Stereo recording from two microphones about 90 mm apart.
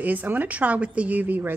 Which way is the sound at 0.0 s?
20° right (ahead or behind).